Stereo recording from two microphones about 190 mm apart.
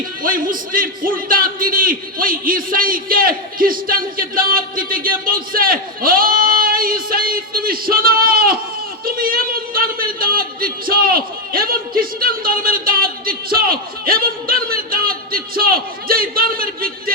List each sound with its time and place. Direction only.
0.2 s a man's voice: 45° right (ahead or behind)